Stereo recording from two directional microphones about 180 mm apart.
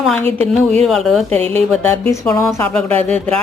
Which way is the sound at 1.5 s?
10° left (ahead or behind).